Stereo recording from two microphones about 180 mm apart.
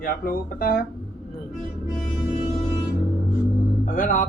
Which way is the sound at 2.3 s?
30° left (ahead or behind).